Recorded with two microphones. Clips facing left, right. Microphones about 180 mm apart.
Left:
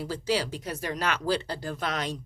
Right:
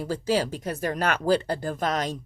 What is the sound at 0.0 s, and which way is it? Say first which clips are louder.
Speech: right 3 dB; 45° right (ahead or behind).